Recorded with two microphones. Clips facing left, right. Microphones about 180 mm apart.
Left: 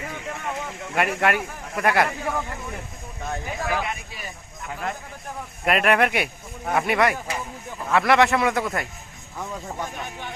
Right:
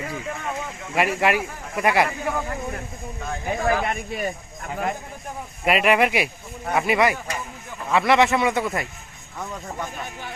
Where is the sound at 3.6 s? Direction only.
50° right (ahead or behind).